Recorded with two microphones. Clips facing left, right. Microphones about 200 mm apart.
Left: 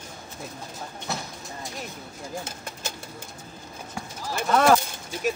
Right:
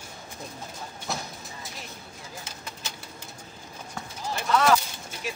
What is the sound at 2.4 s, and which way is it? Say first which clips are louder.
Pigeon: left 5 dB; 50° left (ahead or behind).